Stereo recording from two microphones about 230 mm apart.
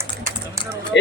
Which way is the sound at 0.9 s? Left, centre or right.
Left.